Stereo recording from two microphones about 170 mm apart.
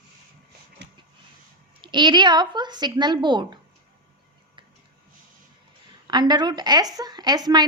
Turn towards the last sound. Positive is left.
turn(degrees=-25)  # may be behind; listen again after turning